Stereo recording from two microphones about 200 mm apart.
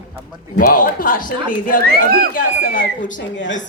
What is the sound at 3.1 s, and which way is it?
Speech, 65° left (ahead or behind).